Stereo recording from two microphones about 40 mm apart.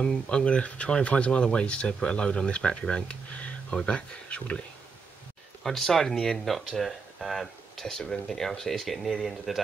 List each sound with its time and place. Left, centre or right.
0.0 s speech: left
5.6 s speech: centre